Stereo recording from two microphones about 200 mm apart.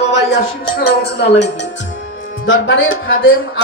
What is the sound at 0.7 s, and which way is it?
Speech, 55° left (ahead or behind).